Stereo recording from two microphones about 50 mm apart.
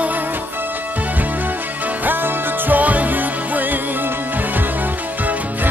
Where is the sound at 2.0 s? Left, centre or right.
Right.